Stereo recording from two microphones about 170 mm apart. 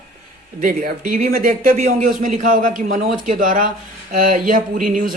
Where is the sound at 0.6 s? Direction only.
55° right (ahead or behind).